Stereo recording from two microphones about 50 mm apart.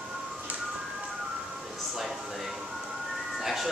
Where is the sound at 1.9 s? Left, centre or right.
Centre.